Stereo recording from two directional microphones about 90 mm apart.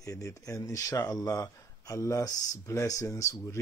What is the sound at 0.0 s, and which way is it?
A man's voice, 35° left (ahead or behind).